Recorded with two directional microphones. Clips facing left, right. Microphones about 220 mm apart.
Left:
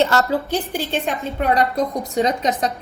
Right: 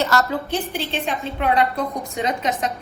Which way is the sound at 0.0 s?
30° left (ahead or behind).